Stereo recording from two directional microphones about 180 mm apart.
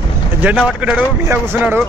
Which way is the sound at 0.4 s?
5° right (ahead or behind).